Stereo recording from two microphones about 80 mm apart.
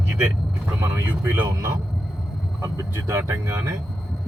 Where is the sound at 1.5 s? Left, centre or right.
Right.